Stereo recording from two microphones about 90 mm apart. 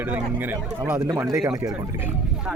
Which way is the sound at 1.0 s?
35° right (ahead or behind).